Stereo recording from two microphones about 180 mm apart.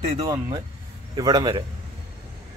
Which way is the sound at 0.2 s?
20° right (ahead or behind).